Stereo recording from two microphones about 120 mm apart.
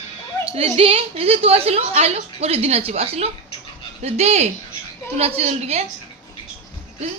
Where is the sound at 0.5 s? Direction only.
55° right (ahead or behind).